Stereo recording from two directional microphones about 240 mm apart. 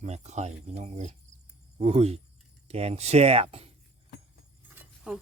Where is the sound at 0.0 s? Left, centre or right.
Right.